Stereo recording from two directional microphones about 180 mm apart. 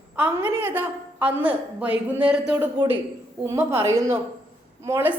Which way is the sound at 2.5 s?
20° right (ahead or behind).